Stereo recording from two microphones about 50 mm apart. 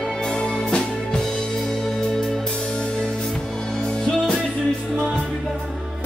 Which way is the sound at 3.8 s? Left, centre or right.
Centre.